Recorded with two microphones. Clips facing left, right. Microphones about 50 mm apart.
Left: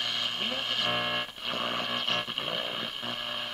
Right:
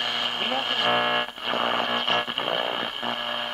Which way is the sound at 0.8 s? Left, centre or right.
Right.